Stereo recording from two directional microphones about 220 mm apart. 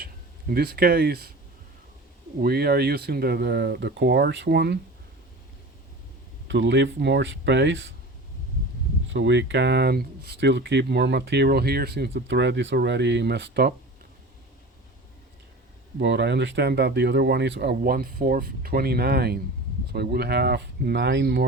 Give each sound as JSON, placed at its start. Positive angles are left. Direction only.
{"t": 0.0, "sound": "speech", "side_deg": -45}
{"t": 2.4, "sound": "speech", "side_deg": -45}
{"t": 6.5, "sound": "speech", "side_deg": -55}
{"t": 9.1, "sound": "speech", "side_deg": -55}
{"t": 16.0, "sound": "speech", "side_deg": -50}